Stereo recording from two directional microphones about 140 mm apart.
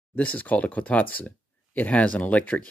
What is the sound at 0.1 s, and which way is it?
Speech, 10° left (ahead or behind).